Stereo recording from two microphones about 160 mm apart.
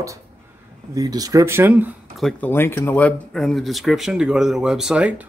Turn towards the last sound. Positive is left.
turn(degrees=-5)  # may be behind; listen again after turning